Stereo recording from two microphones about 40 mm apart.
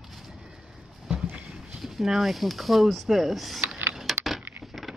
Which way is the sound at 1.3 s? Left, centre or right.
Right.